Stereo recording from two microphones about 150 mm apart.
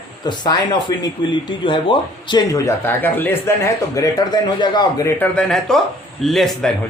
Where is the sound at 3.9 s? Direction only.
25° left (ahead or behind).